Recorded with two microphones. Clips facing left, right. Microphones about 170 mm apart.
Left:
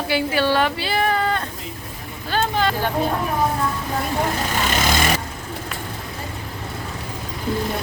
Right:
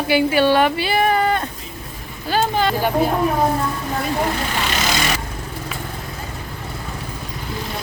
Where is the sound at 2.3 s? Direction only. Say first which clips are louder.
Right 2 dB; 5° right (ahead or behind).